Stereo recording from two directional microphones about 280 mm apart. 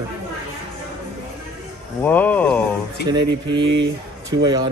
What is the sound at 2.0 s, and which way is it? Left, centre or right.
Speech, centre.